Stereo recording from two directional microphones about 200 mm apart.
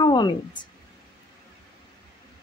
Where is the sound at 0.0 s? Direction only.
20° left (ahead or behind).